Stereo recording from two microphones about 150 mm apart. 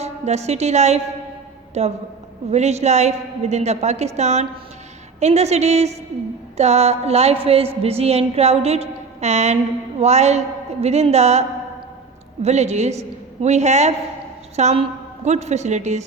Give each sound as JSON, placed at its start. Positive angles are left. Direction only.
{"t": 0.0, "sound": "a woman's voice", "side_deg": -45}